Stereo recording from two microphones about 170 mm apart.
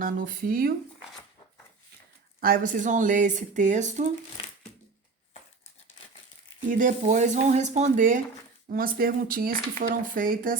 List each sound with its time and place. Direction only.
0.0 s speech: 55° right (ahead or behind)
2.4 s speech: 50° right (ahead or behind)
6.7 s speech: 50° right (ahead or behind)